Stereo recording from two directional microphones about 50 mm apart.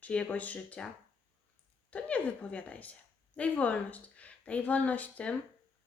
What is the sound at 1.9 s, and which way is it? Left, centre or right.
Speech, left.